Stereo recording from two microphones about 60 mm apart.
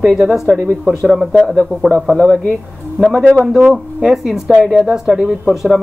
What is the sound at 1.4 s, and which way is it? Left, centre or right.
Speech, centre.